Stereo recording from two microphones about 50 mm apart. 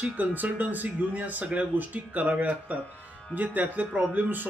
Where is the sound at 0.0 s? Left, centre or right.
Right.